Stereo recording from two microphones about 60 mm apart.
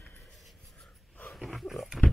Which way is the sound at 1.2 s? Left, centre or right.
Centre.